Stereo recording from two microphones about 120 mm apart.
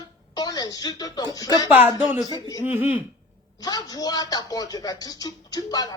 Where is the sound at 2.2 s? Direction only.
30° left (ahead or behind).